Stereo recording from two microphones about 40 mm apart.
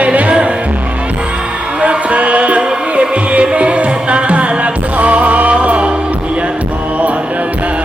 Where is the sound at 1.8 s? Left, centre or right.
Right.